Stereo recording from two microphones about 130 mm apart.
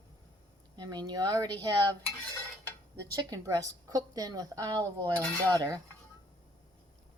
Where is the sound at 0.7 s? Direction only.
30° right (ahead or behind).